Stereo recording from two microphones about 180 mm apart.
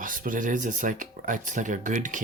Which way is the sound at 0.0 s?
50° right (ahead or behind).